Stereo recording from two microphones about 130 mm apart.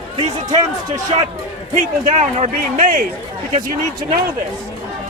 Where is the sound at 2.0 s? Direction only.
75° right (ahead or behind); by 3.0 s 90° right.